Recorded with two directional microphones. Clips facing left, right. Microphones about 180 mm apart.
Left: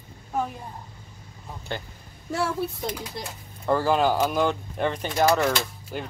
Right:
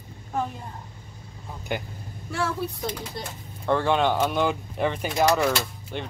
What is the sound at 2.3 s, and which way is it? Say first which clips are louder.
Speech: left 2 dB; 30° left (ahead or behind).